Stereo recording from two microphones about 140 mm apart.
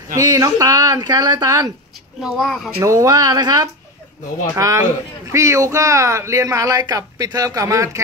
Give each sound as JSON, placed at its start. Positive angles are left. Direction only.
{"t": 0.2, "sound": "speech", "side_deg": -25}
{"t": 2.2, "sound": "speech", "side_deg": 0}
{"t": 2.8, "sound": "speech", "side_deg": -20}